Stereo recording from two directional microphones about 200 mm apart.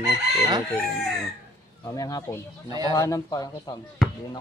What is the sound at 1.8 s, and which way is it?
Speech, 15° left (ahead or behind).